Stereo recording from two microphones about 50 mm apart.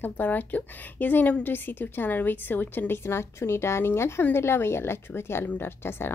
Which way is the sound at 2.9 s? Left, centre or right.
Left.